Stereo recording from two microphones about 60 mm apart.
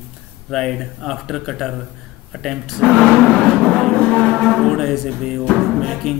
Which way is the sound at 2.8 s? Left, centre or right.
Centre.